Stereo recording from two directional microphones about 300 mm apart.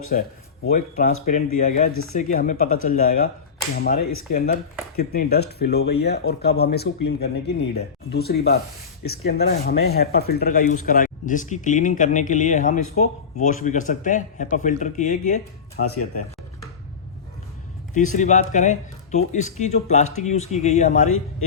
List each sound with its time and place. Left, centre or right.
0.1 s speech: left
4.3 s speech: left
15.8 s speech: left
17.9 s speech: left